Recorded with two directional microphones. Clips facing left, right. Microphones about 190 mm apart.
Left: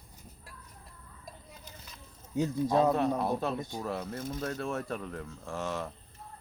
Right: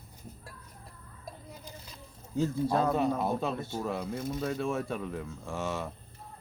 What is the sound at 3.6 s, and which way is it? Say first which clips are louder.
Speech: right 2 dB; 15° left (ahead or behind).